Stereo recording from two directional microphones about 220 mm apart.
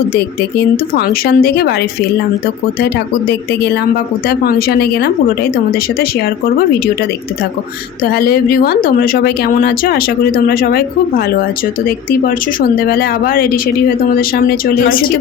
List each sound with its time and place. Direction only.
0.9 s speech: 45° left (ahead or behind)
2.8 s speech: 50° left (ahead or behind)
8.0 s speech: 45° left (ahead or behind)
12.8 s speech: 45° left (ahead or behind)